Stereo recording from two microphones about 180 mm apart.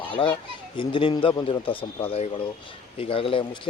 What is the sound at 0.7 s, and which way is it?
A man's voice, 25° left (ahead or behind).